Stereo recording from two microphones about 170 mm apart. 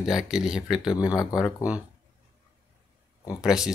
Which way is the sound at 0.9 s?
20° left (ahead or behind).